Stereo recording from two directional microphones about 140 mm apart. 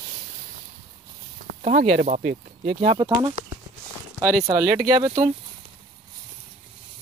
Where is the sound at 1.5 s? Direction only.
60° right (ahead or behind); by 3.0 s 45° right (ahead or behind).